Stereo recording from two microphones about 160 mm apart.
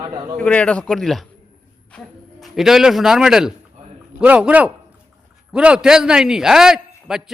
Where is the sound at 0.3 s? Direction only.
5° left (ahead or behind).